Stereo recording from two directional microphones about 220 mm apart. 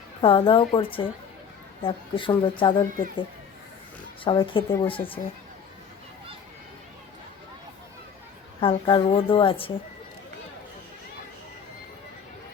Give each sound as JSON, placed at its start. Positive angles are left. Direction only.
{"t": 0.2, "sound": "speech", "side_deg": 25}
{"t": 4.2, "sound": "speech", "side_deg": 25}
{"t": 8.6, "sound": "speech", "side_deg": 20}